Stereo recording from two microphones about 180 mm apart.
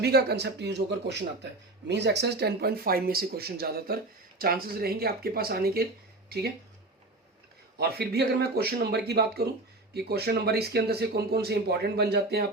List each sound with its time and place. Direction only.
0.0 s speech: 65° right (ahead or behind)
7.8 s speech: 60° right (ahead or behind)